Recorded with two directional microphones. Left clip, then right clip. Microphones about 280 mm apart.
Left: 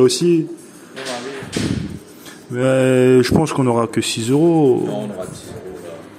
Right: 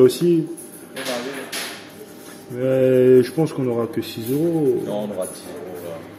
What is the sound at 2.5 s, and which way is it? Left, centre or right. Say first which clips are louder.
Speech: left 2 dB; left.